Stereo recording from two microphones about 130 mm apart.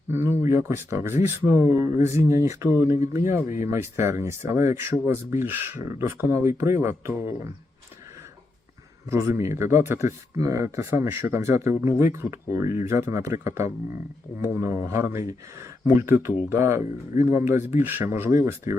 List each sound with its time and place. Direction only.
0.1 s speech: 20° right (ahead or behind)
9.0 s speech: 20° right (ahead or behind)